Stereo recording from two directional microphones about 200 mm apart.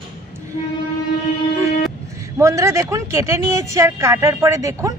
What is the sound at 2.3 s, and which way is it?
Speech, 15° right (ahead or behind).